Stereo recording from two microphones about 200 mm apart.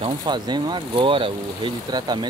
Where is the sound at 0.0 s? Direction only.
20° right (ahead or behind).